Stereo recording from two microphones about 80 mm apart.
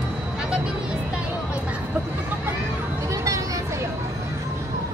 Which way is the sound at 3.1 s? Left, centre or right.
Right.